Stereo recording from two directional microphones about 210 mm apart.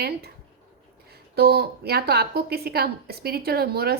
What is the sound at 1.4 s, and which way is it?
A woman's voice, 50° right (ahead or behind).